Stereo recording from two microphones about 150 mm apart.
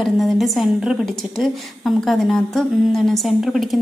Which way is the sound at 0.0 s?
Centre (ahead or behind).